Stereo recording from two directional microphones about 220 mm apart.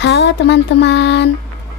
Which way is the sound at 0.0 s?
50° left (ahead or behind).